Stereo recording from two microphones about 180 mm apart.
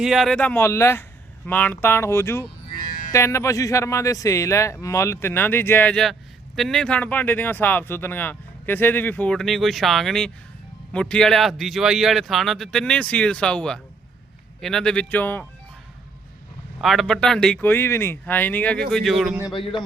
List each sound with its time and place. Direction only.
0.0 s speech: centre (ahead or behind)
16.8 s speech: centre (ahead or behind)
19.5 s a man's voice: 25° left (ahead or behind)